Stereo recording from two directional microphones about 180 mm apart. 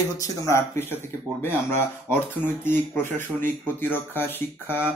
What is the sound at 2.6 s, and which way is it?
Speech, 10° left (ahead or behind).